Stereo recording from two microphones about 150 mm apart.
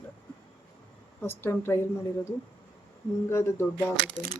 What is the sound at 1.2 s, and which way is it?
Speech, 15° left (ahead or behind).